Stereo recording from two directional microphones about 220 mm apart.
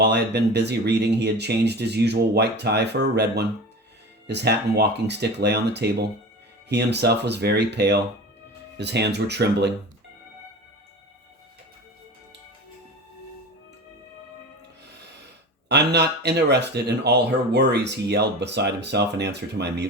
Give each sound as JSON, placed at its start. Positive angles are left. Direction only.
{"t": 0.0, "sound": "speech", "side_deg": -50}
{"t": 15.7, "sound": "speech", "side_deg": -50}